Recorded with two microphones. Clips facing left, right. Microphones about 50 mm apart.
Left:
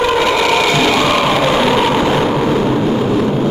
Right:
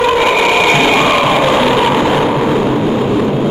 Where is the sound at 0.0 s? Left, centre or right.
Centre.